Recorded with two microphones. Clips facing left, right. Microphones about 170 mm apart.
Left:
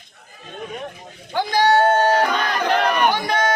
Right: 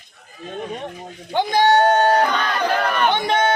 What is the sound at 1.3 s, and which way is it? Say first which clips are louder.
Speech: right 1 dB; 20° right (ahead or behind).